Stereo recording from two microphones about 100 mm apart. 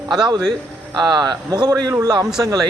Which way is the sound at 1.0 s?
45° right (ahead or behind).